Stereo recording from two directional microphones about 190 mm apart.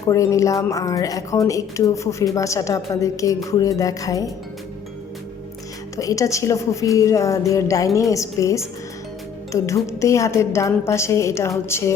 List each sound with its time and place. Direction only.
0.1 s a woman's voice: 15° left (ahead or behind)
6.0 s a woman's voice: 15° left (ahead or behind)